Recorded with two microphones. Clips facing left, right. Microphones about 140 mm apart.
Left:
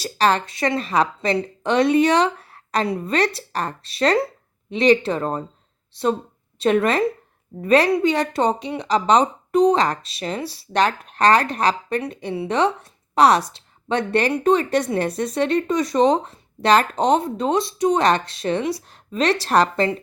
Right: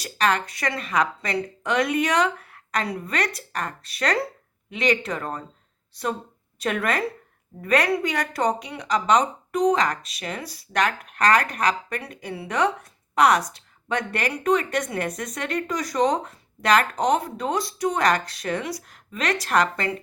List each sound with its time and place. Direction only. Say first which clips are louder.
0.0 s a woman's voice: left 4 dB; 30° left (ahead or behind)